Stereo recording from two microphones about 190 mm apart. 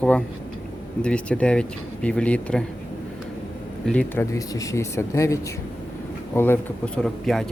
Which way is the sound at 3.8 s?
10° left (ahead or behind).